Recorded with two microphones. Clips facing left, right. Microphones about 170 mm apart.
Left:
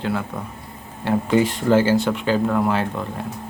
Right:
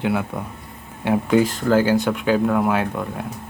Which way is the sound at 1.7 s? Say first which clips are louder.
Even; 15° right (ahead or behind).